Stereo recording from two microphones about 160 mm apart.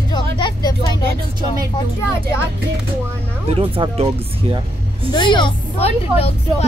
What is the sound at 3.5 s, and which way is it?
Speech, 35° right (ahead or behind).